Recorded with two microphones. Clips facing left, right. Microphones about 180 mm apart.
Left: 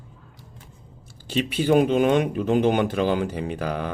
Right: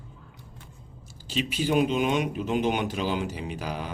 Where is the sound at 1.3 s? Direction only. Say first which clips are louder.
Left 6 dB; 55° left (ahead or behind).